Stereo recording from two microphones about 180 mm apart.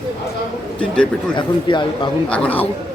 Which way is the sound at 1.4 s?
25° left (ahead or behind).